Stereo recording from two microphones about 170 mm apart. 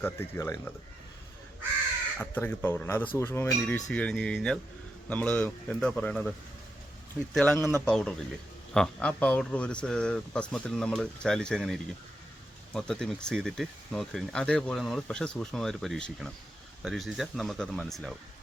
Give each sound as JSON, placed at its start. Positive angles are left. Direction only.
{"t": 0.0, "sound": "a man's voice", "side_deg": 15}
{"t": 2.1, "sound": "a man's voice", "side_deg": 10}
{"t": 7.3, "sound": "a man's voice", "side_deg": 5}